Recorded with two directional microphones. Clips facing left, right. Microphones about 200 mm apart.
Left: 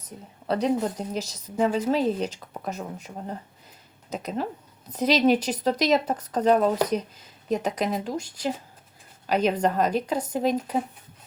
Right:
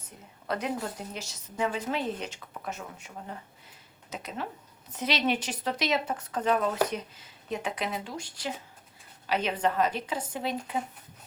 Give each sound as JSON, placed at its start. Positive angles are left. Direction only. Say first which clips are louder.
{"t": 0.4, "sound": "a woman's voice", "louder": "left 8 dB", "side_deg": 30}